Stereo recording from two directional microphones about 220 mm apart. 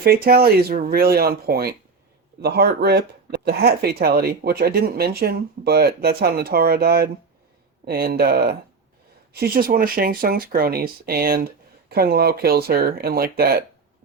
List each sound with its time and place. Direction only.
0.0 s speech: 45° right (ahead or behind)